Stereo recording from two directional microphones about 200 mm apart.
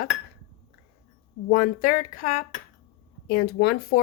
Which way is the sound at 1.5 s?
45° left (ahead or behind).